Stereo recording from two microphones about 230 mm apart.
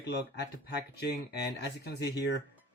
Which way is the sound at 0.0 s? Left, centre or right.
Left.